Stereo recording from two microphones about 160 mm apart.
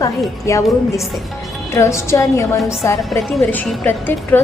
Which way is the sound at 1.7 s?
15° left (ahead or behind).